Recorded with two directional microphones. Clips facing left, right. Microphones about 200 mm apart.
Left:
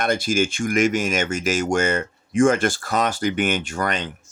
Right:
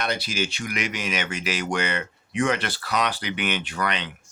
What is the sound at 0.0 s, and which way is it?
Speech, 50° left (ahead or behind).